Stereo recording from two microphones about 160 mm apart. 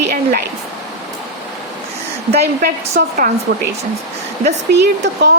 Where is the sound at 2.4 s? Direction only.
75° right (ahead or behind).